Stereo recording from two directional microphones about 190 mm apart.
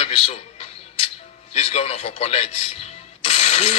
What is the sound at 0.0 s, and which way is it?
Music, 30° left (ahead or behind).